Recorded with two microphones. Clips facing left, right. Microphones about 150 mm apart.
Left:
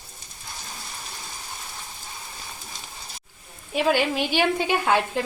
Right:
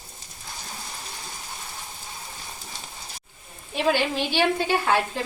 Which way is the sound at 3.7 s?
10° left (ahead or behind).